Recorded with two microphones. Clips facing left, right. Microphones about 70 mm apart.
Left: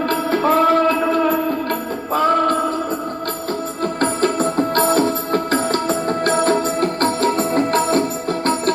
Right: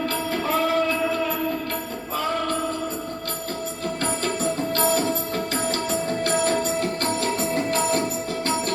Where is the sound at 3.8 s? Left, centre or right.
Left.